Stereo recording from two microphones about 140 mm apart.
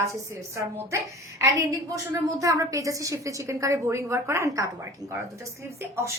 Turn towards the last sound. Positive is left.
turn(degrees=-20)  # may be behind; listen again after turning